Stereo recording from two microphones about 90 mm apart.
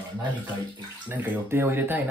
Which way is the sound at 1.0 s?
20° right (ahead or behind).